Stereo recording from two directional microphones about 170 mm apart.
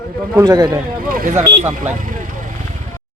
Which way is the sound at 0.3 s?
20° right (ahead or behind).